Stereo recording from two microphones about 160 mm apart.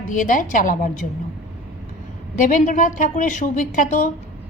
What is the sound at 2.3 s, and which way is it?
A woman's voice, 55° left (ahead or behind).